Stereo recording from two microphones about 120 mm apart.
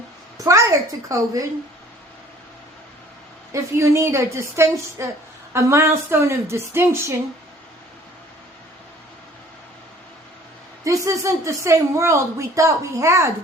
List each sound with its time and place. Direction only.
0.3 s a woman's voice: 25° right (ahead or behind)
3.5 s speech: 25° right (ahead or behind)
10.8 s speech: 25° right (ahead or behind)